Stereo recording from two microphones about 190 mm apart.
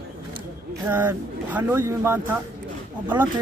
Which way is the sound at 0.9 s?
10° right (ahead or behind).